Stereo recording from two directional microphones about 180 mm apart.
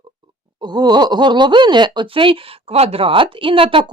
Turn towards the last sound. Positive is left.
turn(degrees=-30)  # may be behind; listen again after turning